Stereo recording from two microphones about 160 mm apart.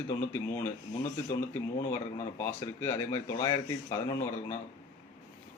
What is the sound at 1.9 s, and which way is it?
Speech, 15° left (ahead or behind).